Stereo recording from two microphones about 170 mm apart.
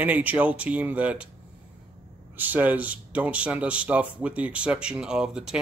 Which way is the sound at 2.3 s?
10° right (ahead or behind).